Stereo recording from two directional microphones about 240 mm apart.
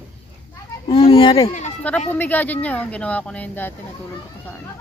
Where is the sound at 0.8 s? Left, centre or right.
Left.